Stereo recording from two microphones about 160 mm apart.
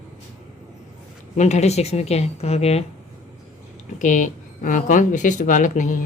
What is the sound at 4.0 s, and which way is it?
Speech, 50° left (ahead or behind).